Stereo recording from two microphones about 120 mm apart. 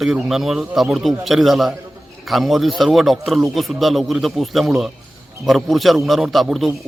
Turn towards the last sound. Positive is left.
turn(degrees=0)  # may be behind; listen again after turning